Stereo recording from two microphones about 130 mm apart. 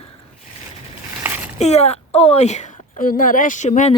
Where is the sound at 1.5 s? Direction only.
55° left (ahead or behind).